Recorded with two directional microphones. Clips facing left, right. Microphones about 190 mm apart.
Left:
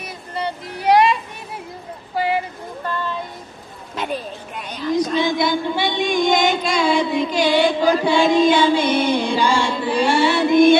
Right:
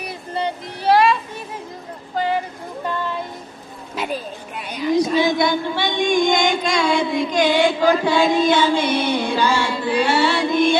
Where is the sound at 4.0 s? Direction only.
5° right (ahead or behind).